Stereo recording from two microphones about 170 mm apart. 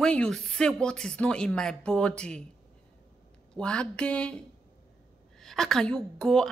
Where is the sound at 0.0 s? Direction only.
5° left (ahead or behind).